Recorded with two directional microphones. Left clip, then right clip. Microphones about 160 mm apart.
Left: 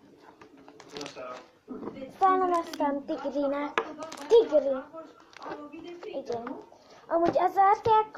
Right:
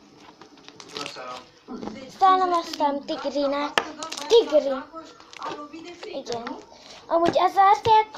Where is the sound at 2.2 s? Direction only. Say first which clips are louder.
Right 6 dB; centre (ahead or behind).